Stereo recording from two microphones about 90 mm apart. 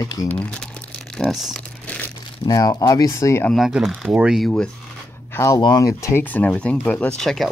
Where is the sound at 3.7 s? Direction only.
5° right (ahead or behind).